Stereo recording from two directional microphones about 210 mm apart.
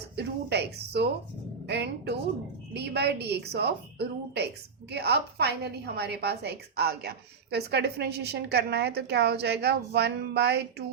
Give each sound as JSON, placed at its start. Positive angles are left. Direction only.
{"t": 0.2, "sound": "a woman's voice", "side_deg": -55}